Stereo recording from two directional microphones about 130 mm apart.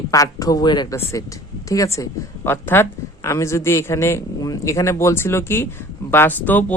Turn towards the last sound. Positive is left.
turn(degrees=15)  # may be behind; listen again after turning